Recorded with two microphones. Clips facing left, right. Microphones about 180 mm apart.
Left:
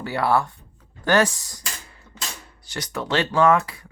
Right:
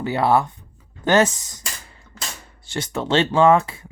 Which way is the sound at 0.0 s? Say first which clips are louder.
Right 3 dB; 20° right (ahead or behind).